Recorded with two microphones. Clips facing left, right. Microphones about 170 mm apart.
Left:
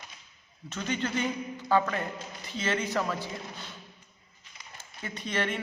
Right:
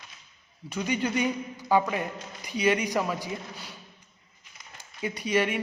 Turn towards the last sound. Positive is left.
turn(degrees=-10)  # may be behind; listen again after turning